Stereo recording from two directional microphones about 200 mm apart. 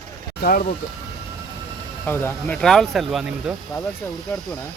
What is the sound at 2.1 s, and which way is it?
Speech, 10° left (ahead or behind).